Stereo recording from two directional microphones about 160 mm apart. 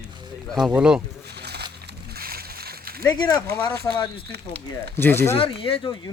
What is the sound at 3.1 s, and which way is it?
Speech, 25° left (ahead or behind).